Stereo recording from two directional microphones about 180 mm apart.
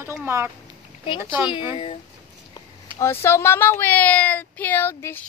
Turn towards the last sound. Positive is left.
turn(degrees=10)  # may be behind; listen again after turning